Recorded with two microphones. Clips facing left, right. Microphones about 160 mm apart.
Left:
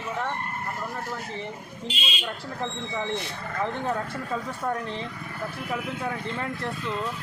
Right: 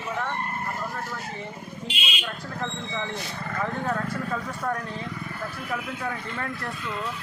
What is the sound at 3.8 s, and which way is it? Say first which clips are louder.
Speech: right 1 dB; 25° left (ahead or behind).